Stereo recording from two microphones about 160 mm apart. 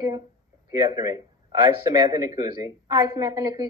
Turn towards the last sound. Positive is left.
turn(degrees=-20)  # may be behind; listen again after turning